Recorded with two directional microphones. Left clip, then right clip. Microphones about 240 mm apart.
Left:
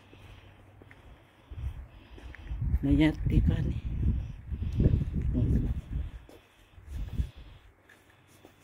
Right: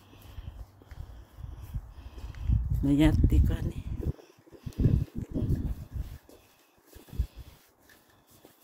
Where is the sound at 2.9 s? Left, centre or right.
Centre.